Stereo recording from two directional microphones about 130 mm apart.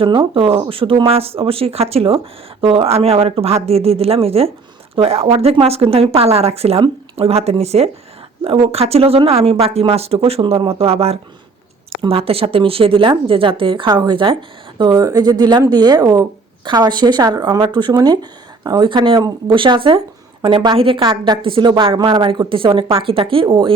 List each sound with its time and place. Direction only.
0.0 s a woman's voice: 40° right (ahead or behind)